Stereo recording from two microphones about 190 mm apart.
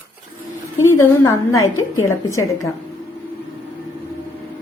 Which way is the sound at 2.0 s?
15° left (ahead or behind).